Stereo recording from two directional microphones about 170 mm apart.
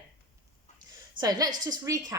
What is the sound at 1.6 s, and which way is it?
Speech, 20° right (ahead or behind).